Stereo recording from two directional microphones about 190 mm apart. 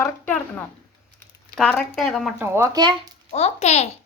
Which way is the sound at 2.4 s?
15° right (ahead or behind).